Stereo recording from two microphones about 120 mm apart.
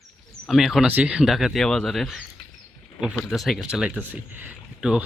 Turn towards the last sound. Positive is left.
turn(degrees=-5)  # may be behind; listen again after turning